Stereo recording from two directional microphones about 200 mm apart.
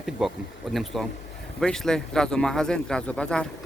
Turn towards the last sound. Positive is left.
turn(degrees=5)  # may be behind; listen again after turning